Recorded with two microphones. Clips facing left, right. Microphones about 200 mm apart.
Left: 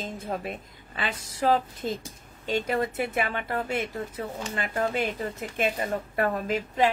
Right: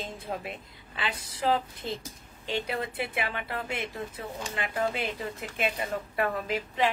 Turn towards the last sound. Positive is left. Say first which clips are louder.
# left 4 dB
turn(degrees=45)  # may be behind; listen again after turning